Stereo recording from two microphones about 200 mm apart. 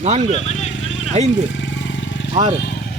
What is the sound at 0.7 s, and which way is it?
Vehicle, 70° left (ahead or behind).